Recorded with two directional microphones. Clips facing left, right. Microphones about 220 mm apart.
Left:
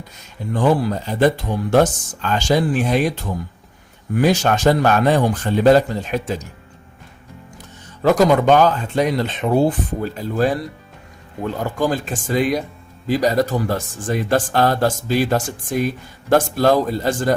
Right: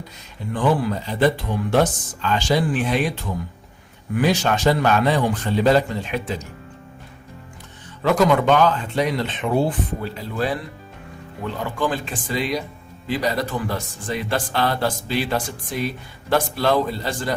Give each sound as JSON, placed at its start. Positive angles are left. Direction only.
{"t": 0.5, "sound": "speech", "side_deg": 40}
{"t": 4.1, "sound": "speech", "side_deg": 45}
{"t": 8.0, "sound": "speech", "side_deg": 40}